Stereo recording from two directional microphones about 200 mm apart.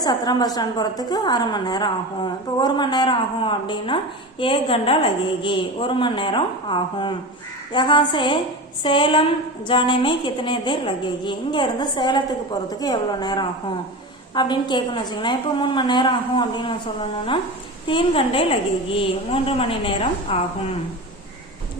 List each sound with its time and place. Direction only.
0.0 s a woman's voice: 20° left (ahead or behind)
17.8 s a woman's voice: 25° left (ahead or behind)